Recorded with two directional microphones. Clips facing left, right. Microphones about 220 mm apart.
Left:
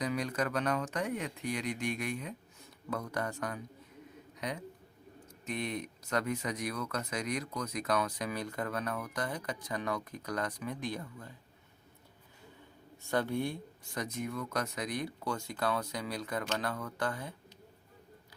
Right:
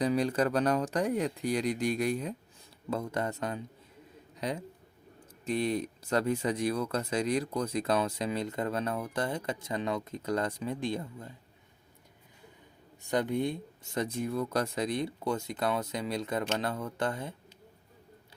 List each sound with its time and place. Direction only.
0.0 s speech: 30° right (ahead or behind)
2.9 s speech: 25° right (ahead or behind)
13.0 s speech: 15° right (ahead or behind)